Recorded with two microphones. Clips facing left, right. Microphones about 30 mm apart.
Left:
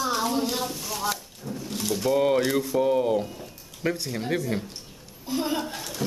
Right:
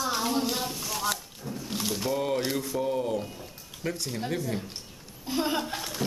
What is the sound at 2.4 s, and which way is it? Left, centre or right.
Mantra, centre.